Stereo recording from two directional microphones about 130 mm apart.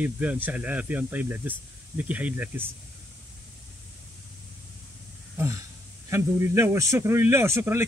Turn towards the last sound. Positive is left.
turn(degrees=-20)  # may be behind; listen again after turning